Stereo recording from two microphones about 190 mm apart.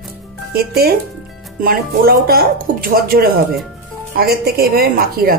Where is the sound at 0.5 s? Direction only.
55° right (ahead or behind).